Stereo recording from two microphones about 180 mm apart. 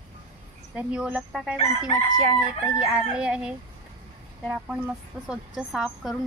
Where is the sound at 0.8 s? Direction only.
5° right (ahead or behind).